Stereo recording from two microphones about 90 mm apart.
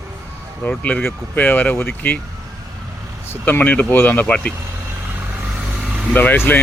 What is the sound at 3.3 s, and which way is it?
A man's voice, 20° left (ahead or behind).